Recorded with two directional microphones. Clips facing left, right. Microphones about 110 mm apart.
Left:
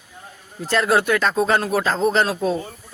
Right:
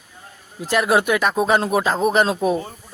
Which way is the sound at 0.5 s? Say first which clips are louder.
Right 1 dB; 15° right (ahead or behind).